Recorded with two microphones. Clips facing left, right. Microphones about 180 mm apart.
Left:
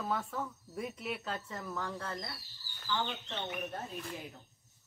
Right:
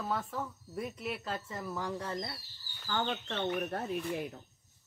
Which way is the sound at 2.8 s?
55° right (ahead or behind).